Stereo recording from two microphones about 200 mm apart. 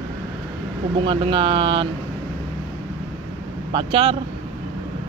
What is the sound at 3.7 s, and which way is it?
Speech, 25° right (ahead or behind).